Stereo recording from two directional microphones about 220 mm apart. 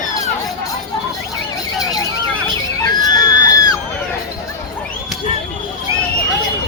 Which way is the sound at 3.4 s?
15° left (ahead or behind).